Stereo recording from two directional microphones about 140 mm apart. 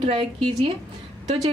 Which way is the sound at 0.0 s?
40° right (ahead or behind).